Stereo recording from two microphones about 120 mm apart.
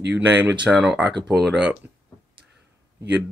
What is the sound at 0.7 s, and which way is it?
Speech, 10° right (ahead or behind).